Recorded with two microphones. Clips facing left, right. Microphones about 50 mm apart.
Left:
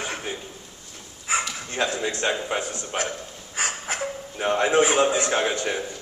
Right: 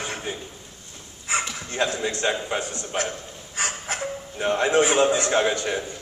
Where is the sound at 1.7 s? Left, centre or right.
Centre.